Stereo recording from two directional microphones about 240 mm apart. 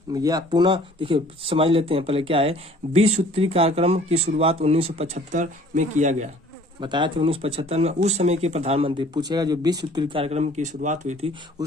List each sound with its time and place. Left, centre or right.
0.1 s speech: centre
6.7 s speech: centre